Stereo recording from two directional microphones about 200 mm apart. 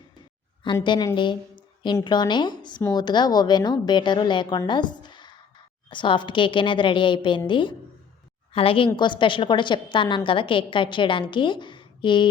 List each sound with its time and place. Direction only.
0.9 s a woman's voice: 20° left (ahead or behind)